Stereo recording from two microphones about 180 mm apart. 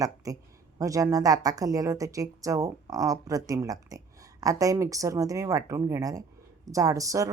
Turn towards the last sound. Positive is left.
turn(degrees=-20)  # may be behind; listen again after turning